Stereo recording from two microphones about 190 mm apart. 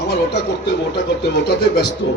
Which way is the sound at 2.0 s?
70° left (ahead or behind).